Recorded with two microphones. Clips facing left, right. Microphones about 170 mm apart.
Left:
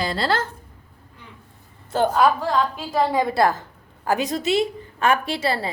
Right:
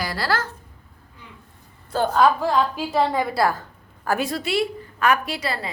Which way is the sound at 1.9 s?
15° left (ahead or behind).